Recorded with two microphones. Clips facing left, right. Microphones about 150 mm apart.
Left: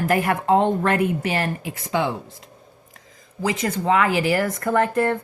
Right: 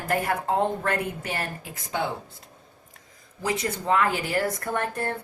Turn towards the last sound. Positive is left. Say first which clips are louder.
# left 9 dB
turn(degrees=90)